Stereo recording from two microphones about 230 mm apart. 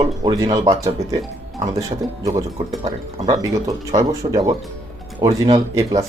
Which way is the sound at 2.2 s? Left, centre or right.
Centre.